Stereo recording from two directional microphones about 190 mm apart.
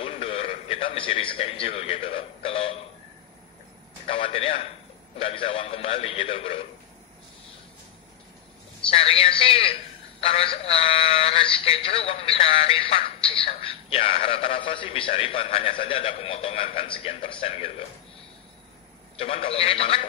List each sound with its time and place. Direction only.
0.0 s a man's voice: 30° left (ahead or behind)
4.1 s a man's voice: 30° left (ahead or behind)
8.9 s speech: 30° left (ahead or behind)
19.1 s a man's voice: 30° left (ahead or behind)